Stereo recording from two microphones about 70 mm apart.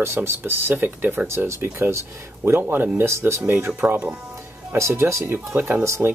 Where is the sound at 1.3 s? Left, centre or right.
Right; by 4.2 s centre.